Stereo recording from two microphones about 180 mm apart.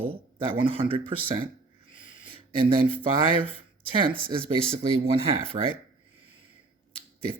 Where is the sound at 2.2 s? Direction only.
30° right (ahead or behind).